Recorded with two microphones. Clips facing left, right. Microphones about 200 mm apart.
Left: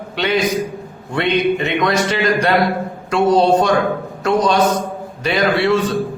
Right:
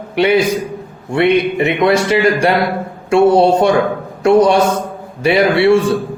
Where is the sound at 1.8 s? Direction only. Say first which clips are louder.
Right 8 dB; 30° right (ahead or behind).